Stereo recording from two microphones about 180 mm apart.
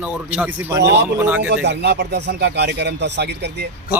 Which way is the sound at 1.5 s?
70° right (ahead or behind).